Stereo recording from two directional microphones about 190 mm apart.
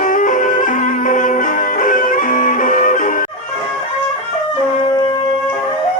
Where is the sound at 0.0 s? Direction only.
45° left (ahead or behind).